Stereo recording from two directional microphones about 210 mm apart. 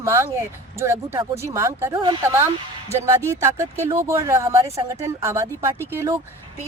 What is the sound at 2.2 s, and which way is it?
A woman's voice, 10° right (ahead or behind).